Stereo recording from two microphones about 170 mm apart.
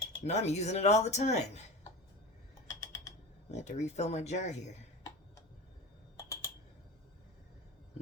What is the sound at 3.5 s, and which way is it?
Speech, 40° left (ahead or behind).